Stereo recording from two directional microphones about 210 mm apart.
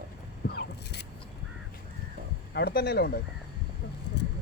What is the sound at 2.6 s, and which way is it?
Speech, 50° left (ahead or behind).